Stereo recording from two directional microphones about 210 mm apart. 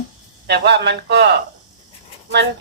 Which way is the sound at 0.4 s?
55° right (ahead or behind).